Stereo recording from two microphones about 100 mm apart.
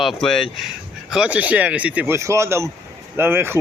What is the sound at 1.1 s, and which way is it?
Speech, 10° right (ahead or behind).